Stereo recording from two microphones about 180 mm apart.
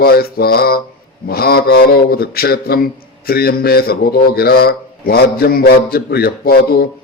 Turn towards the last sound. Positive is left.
turn(degrees=60)  # may be behind; listen again after turning